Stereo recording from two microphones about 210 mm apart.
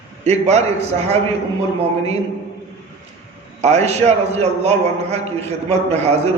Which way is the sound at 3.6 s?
30° right (ahead or behind).